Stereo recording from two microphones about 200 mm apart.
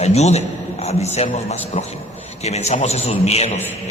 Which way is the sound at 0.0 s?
35° left (ahead or behind).